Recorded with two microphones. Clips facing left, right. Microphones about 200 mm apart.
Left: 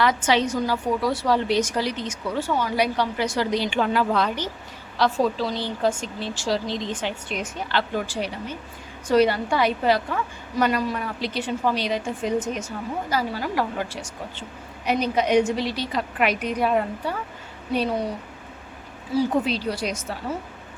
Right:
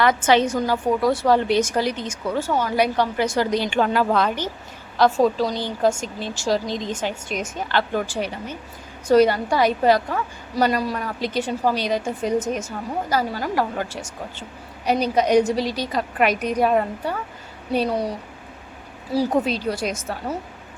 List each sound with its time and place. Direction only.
0.0 s a woman's voice: 50° right (ahead or behind)
19.1 s a woman's voice: 45° right (ahead or behind)